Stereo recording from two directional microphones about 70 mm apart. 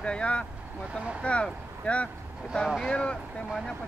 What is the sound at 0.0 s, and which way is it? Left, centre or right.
Speech, centre.